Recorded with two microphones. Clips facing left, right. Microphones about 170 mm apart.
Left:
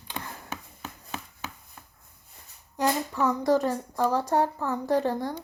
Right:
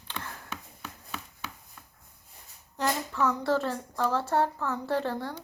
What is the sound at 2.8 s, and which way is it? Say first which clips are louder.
Speech: left 3 dB; 15° left (ahead or behind).